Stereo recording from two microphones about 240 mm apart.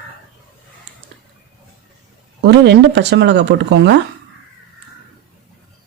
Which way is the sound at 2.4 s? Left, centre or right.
Right.